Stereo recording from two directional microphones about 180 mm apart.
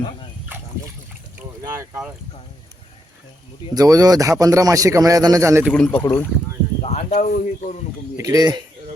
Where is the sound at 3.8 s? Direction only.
20° right (ahead or behind).